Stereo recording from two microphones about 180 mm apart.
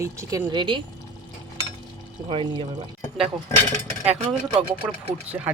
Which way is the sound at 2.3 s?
25° right (ahead or behind).